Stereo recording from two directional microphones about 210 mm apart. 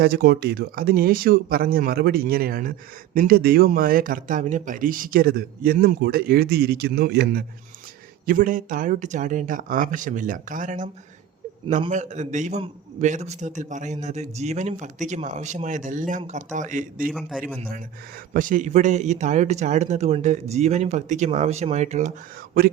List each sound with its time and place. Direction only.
0.0 s a man's voice: 45° right (ahead or behind)
17.1 s a man's voice: centre (ahead or behind)
18.3 s a man's voice: 40° right (ahead or behind)